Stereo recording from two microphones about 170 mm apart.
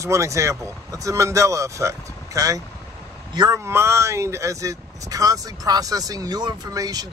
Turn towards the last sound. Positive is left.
turn(degrees=-20)  # may be behind; listen again after turning